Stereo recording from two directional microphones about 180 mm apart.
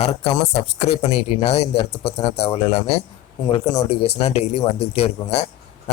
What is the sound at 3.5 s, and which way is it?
Speech, 25° left (ahead or behind).